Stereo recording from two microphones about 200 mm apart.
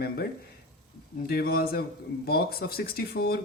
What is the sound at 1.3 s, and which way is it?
Speech, 50° left (ahead or behind).